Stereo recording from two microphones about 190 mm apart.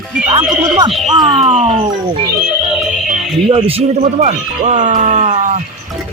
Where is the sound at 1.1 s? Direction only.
30° right (ahead or behind).